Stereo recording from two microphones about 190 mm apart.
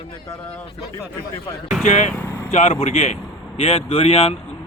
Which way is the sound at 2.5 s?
35° left (ahead or behind).